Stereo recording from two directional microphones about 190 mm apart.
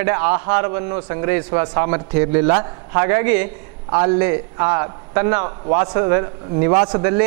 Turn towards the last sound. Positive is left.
turn(degrees=-25)  # may be behind; listen again after turning